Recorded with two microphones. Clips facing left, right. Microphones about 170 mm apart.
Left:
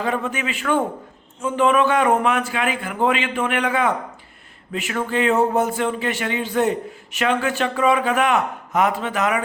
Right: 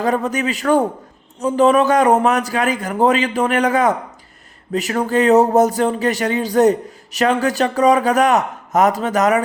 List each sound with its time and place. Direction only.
0.0 s speech: 40° right (ahead or behind)